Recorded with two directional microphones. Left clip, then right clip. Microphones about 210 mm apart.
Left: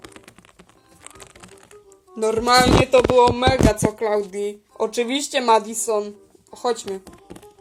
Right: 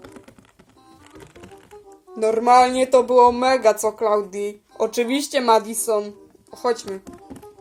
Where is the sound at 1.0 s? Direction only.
45° left (ahead or behind).